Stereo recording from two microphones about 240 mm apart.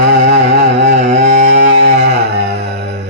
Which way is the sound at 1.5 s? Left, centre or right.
Right.